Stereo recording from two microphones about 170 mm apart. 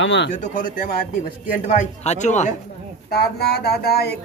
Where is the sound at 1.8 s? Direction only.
45° left (ahead or behind).